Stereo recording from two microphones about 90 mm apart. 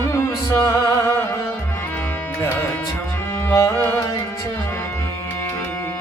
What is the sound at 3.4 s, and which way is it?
Music, 25° left (ahead or behind).